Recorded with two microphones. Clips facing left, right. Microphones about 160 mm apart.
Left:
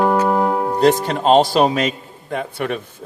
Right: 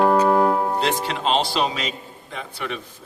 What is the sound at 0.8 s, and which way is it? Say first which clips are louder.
Speech: left 8 dB; 45° left (ahead or behind).